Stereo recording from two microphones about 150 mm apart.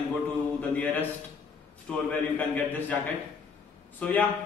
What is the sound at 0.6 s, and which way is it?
A man's voice, 10° left (ahead or behind).